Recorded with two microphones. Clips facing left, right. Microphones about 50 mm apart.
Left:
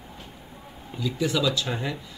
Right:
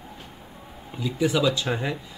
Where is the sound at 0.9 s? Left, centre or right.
Centre.